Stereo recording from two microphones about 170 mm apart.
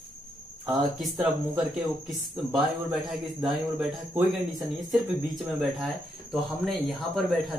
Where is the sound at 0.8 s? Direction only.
Centre (ahead or behind).